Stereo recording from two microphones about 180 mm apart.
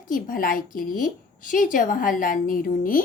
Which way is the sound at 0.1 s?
50° left (ahead or behind).